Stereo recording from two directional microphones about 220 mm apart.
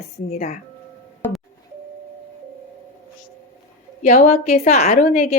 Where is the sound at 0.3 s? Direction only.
30° left (ahead or behind).